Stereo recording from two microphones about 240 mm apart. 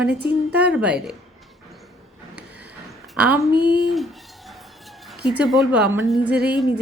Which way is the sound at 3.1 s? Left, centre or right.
Centre.